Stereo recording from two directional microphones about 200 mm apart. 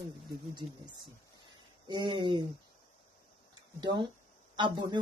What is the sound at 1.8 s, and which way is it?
Speech, 25° right (ahead or behind).